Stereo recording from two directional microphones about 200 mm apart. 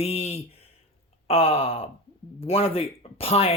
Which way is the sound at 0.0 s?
30° left (ahead or behind).